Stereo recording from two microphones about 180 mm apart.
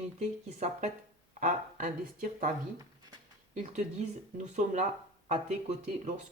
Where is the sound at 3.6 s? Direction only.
40° right (ahead or behind).